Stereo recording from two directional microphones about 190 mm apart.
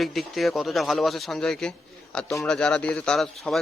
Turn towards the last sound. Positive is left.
turn(degrees=0)  # may be behind; listen again after turning